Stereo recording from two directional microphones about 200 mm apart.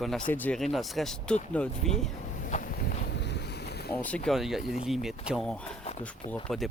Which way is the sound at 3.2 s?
60° left (ahead or behind).